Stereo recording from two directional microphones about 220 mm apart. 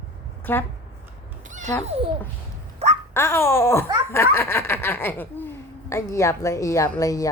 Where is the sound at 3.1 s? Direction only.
10° left (ahead or behind).